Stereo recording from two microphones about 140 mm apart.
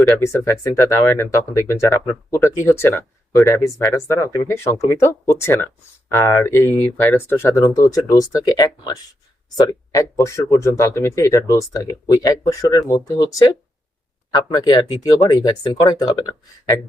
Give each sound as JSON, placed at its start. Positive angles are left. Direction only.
{"t": 0.2, "sound": "speech", "side_deg": 20}